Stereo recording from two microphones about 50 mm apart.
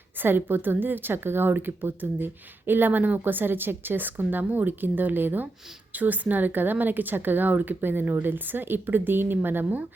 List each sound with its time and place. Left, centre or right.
0.2 s a woman's voice: right